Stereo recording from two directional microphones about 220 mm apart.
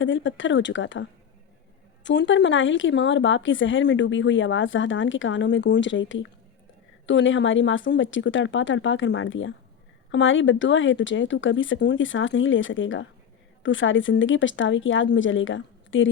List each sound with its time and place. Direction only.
0.0 s speech: 55° left (ahead or behind)
2.0 s speech: 55° left (ahead or behind)